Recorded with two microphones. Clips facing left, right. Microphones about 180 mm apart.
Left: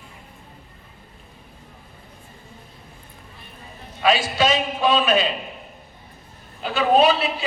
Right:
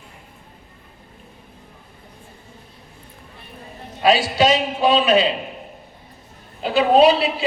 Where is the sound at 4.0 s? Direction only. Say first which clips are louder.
Right 3 dB; 35° right (ahead or behind).